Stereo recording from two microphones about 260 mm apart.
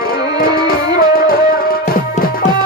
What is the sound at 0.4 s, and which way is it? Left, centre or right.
Music, left.